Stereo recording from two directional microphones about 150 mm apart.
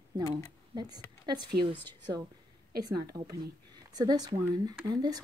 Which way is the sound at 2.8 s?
25° right (ahead or behind).